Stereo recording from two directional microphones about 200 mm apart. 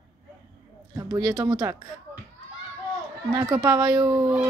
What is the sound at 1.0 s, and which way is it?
Speech, 15° right (ahead or behind).